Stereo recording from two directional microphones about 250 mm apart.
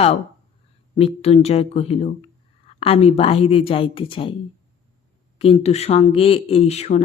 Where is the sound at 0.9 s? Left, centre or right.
Left.